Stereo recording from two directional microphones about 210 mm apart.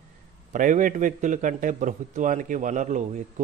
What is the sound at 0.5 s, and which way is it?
A man's voice, 40° right (ahead or behind).